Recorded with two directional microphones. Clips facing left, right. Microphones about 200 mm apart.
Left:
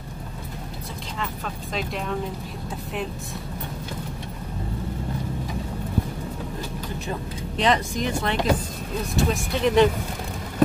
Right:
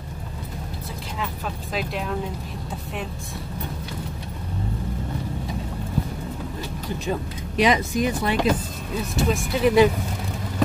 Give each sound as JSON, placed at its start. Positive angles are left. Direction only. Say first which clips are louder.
{"t": 1.2, "sound": "speech", "louder": "right 1 dB", "side_deg": -5}
{"t": 7.1, "sound": "speech", "louder": "right 5 dB", "side_deg": -10}